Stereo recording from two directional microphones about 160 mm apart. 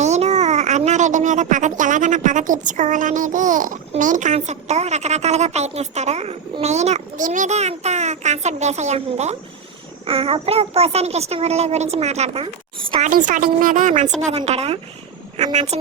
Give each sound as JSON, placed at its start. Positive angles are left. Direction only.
{"t": 0.0, "sound": "a child's voice", "side_deg": -45}
{"t": 13.0, "sound": "a woman's voice", "side_deg": -55}